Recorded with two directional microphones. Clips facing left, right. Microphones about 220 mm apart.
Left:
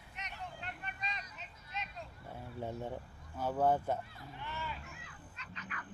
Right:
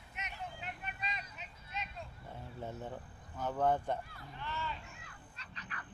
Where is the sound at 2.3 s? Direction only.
15° left (ahead or behind).